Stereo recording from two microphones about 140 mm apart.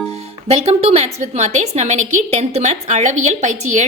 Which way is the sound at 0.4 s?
45° right (ahead or behind).